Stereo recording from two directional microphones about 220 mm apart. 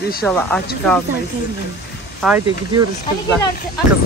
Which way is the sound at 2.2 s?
Centre (ahead or behind).